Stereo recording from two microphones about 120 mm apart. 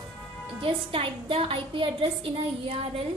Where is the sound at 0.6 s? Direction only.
50° right (ahead or behind).